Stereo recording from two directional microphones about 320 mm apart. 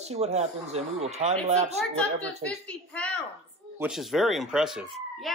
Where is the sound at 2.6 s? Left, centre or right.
Centre.